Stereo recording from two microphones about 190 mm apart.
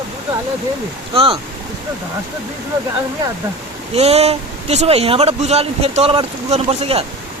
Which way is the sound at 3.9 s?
35° right (ahead or behind).